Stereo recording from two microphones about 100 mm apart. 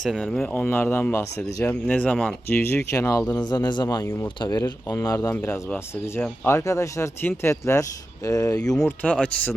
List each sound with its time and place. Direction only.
0.0 s speech: centre (ahead or behind)
0.4 s speech: 20° left (ahead or behind)
1.6 s speech: 15° left (ahead or behind); by 5.3 s 35° left (ahead or behind)
5.6 s speech: 15° left (ahead or behind)
6.6 s speech: 30° left (ahead or behind)
8.7 s speech: 5° left (ahead or behind)